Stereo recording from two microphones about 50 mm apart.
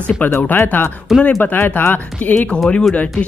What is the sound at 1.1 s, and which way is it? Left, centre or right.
Speech, centre.